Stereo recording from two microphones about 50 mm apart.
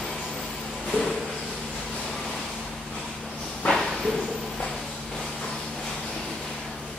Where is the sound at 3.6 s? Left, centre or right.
Left.